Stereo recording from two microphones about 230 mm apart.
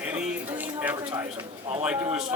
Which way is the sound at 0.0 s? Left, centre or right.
Centre.